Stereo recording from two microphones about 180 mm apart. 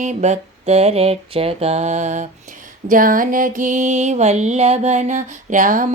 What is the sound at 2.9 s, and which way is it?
Music, 50° right (ahead or behind).